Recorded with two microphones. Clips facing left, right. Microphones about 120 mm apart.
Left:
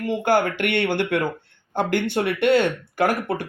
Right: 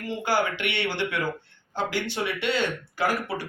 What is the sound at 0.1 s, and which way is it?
Speech, 55° left (ahead or behind).